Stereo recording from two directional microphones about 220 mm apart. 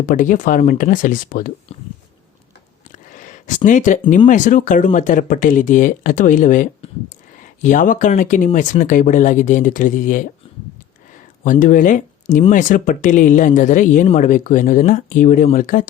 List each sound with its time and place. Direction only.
0.0 s speech: 35° left (ahead or behind)
2.9 s a sound: 35° left (ahead or behind)
4.3 s speech: 35° left (ahead or behind)
11.6 s speech: 35° left (ahead or behind)